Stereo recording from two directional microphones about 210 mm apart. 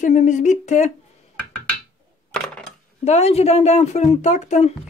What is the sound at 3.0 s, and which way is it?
A woman's voice, 30° left (ahead or behind).